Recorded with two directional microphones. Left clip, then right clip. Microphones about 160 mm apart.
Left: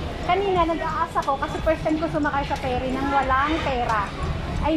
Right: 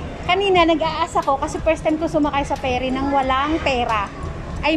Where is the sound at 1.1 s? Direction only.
25° right (ahead or behind).